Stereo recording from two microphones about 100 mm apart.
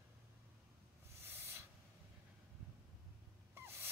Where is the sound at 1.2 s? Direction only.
25° right (ahead or behind).